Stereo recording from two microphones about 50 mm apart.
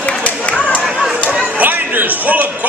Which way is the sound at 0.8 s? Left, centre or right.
Centre.